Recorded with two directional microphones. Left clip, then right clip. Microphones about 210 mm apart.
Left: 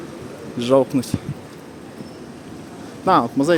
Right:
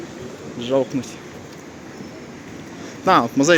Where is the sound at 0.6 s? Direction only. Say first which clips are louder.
Left 4 dB; 30° left (ahead or behind).